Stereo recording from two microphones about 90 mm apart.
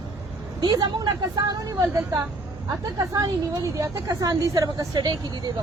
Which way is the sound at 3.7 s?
40° right (ahead or behind).